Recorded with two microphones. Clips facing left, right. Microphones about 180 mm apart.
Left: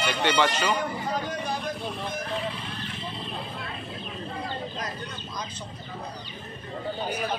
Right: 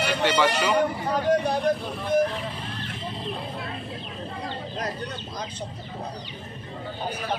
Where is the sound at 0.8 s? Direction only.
65° right (ahead or behind).